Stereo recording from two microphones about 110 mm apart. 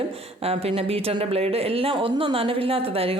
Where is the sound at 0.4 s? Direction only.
65° right (ahead or behind).